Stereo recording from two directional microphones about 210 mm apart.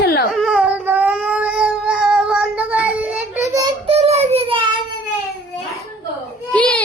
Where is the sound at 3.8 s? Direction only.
30° right (ahead or behind).